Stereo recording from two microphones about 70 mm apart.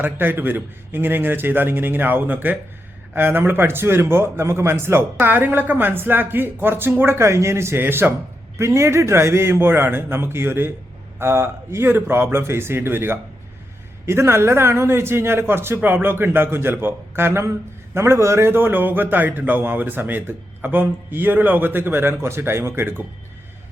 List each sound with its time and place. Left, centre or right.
0.0 s a man's voice: right
8.5 s a man's voice: right